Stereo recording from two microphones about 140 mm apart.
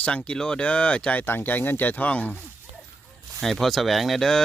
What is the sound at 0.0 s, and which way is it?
Speech, 10° left (ahead or behind).